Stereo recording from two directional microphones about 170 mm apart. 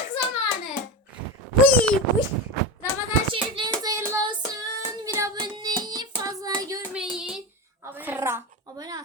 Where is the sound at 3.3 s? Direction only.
25° right (ahead or behind).